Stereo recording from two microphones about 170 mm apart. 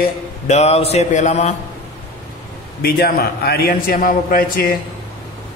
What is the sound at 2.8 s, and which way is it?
A man's voice, 65° left (ahead or behind).